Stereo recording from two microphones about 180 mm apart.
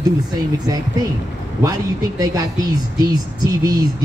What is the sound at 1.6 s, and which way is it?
Speech, 20° right (ahead or behind).